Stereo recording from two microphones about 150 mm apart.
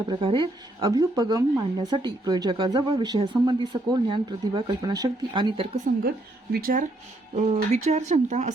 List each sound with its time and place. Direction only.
0.1 s a woman's voice: 35° right (ahead or behind)
6.5 s speech: 75° right (ahead or behind)
7.3 s speech: 50° right (ahead or behind)